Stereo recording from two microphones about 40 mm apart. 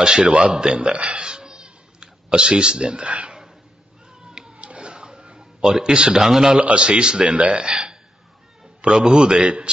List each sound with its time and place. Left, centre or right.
0.0 s speech: right
4.2 s a sound: centre
6.1 s a man's voice: centre
6.6 s a man's voice: right